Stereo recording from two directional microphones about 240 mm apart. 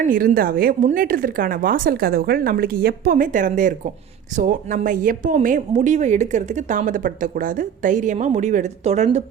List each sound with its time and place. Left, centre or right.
0.1 s speech: right